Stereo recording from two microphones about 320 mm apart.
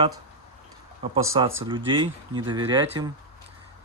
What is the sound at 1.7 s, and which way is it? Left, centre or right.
Speech, centre.